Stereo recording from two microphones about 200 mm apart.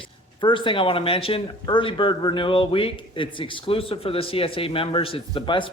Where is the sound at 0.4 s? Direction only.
25° left (ahead or behind).